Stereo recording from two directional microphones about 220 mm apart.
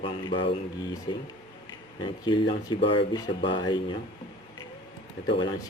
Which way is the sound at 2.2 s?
20° left (ahead or behind).